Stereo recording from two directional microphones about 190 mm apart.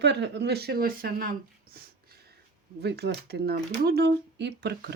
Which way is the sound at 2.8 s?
60° right (ahead or behind).